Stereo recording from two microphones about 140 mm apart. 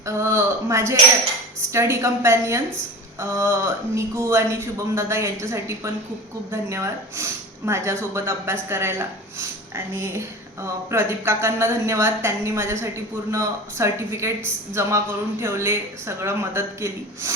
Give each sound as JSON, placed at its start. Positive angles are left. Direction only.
{"t": 0.0, "sound": "speech", "side_deg": -20}